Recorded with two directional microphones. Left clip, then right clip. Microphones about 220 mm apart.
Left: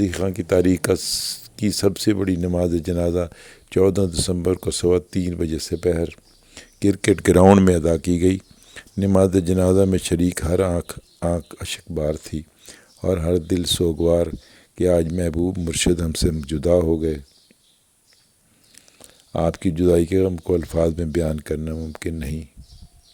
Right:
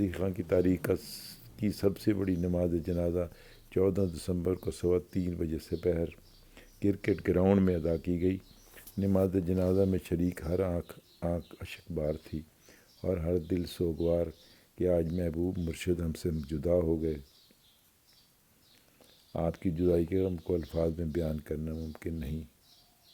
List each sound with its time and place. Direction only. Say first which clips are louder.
0.0 s speech: left 10 dB; 40° left (ahead or behind)
18.9 s speech: left 12 dB; 45° left (ahead or behind)